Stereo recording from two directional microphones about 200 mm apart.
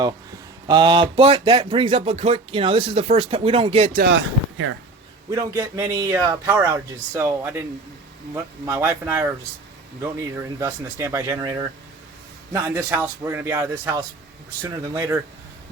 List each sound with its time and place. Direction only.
0.7 s speech: 25° right (ahead or behind)
3.9 s speech: 60° right (ahead or behind)
5.3 s a man's voice: 15° right (ahead or behind)
8.6 s a man's voice: 10° right (ahead or behind)
10.6 s a man's voice: 15° right (ahead or behind)